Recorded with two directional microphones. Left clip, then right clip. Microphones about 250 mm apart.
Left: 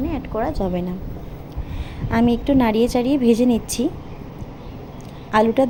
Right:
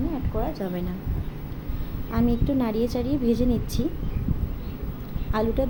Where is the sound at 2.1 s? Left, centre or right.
Left.